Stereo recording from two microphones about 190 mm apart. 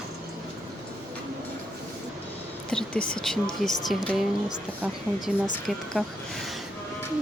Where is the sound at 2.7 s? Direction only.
5° left (ahead or behind).